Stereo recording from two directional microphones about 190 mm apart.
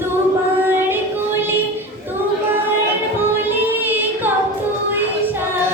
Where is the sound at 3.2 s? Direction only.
10° right (ahead or behind).